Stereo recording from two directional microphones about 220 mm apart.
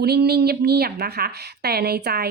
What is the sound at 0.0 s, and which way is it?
Speech, 45° right (ahead or behind).